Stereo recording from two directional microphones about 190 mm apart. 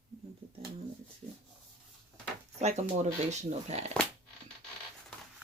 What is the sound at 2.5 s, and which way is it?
Speech, 35° right (ahead or behind).